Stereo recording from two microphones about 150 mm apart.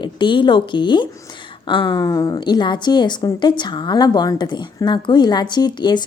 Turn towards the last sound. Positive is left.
turn(degrees=30)  # may be behind; listen again after turning